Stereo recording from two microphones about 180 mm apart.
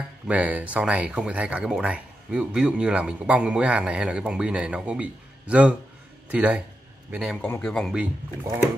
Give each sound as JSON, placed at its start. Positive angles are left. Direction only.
{"t": 0.3, "sound": "a man's voice", "side_deg": -10}